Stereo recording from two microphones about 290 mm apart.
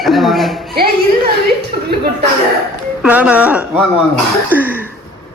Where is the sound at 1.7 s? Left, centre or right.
Right.